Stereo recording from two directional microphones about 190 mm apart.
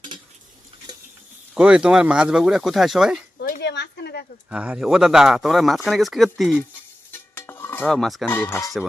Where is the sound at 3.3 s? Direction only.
55° left (ahead or behind).